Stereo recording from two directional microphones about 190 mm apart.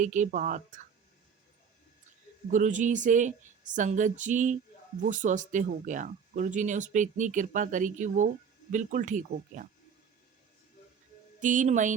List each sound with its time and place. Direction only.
0.0 s speech: 40° right (ahead or behind)
2.5 s speech: 40° right (ahead or behind)
11.3 s speech: 40° right (ahead or behind)